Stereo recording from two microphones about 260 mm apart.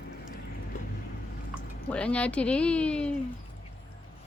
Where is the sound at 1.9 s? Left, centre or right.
Centre.